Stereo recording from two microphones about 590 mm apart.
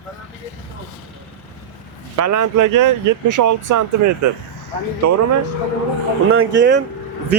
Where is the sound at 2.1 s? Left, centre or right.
Right.